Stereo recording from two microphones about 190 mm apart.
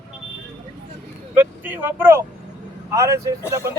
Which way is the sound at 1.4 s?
10° right (ahead or behind).